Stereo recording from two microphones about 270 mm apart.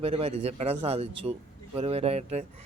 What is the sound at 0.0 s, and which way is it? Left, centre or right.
A man's voice, right.